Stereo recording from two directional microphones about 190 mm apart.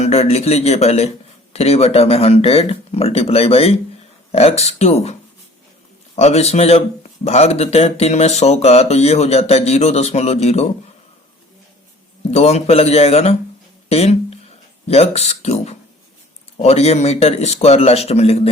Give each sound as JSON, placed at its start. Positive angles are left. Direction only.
{"t": 0.0, "sound": "speech", "side_deg": 35}
{"t": 6.1, "sound": "speech", "side_deg": 35}
{"t": 12.3, "sound": "speech", "side_deg": 35}